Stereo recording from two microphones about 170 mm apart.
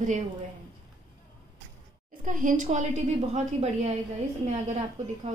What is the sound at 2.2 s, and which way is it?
Speech, 50° right (ahead or behind).